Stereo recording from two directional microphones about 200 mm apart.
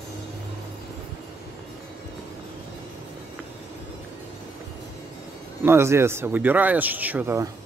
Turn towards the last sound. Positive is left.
turn(degrees=-15)  # may be behind; listen again after turning